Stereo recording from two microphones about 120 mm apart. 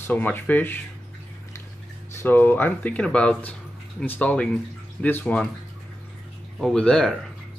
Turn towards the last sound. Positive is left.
turn(degrees=5)  # may be behind; listen again after turning